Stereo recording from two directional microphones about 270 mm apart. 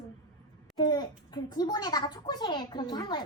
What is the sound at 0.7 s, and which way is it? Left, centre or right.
A child's voice, centre.